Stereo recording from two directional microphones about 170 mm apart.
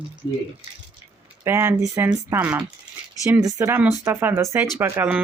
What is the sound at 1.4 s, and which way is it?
Speech, 15° right (ahead or behind).